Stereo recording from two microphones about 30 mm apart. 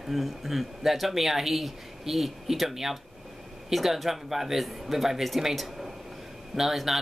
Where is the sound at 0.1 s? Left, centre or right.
Centre.